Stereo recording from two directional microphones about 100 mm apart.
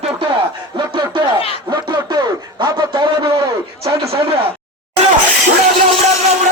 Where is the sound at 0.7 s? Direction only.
50° right (ahead or behind).